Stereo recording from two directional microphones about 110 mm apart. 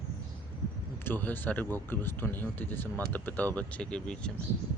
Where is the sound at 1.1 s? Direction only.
15° left (ahead or behind).